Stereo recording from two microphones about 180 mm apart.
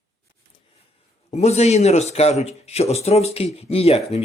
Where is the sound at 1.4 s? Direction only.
35° left (ahead or behind).